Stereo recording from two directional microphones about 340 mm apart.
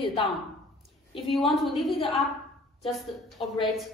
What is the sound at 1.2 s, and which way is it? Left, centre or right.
A woman's voice, centre.